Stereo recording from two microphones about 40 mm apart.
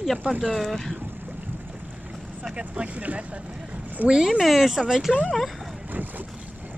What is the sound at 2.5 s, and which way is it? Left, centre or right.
Speech, right.